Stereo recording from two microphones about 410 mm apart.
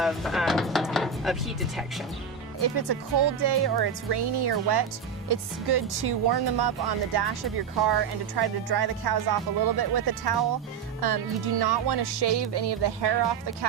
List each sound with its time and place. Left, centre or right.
0.0 s speech: centre
2.7 s speech: right